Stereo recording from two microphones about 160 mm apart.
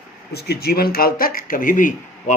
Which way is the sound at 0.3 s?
85° left.